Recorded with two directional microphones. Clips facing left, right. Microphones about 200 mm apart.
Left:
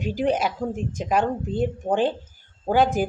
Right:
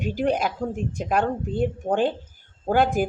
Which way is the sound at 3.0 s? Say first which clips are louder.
Right 1 dB; 45° right (ahead or behind).